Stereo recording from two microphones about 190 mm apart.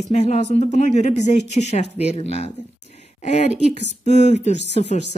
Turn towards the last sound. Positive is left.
turn(degrees=35)  # may be behind; listen again after turning